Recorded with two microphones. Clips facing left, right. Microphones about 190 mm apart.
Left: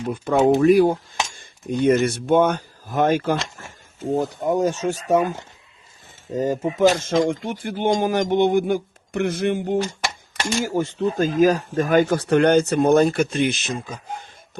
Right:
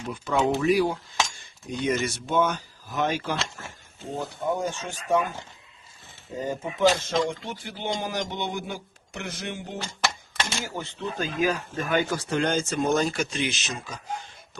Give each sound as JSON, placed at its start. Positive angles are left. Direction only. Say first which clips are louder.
{"t": 0.0, "sound": "speech", "louder": "left 7 dB", "side_deg": 50}
{"t": 6.4, "sound": "speech", "louder": "left 5 dB", "side_deg": 40}
{"t": 10.6, "sound": "speech", "louder": "left 11 dB", "side_deg": 45}
{"t": 12.1, "sound": "speech", "louder": "left 9 dB", "side_deg": 60}